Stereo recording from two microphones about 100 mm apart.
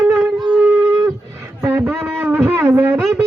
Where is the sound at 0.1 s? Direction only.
15° right (ahead or behind).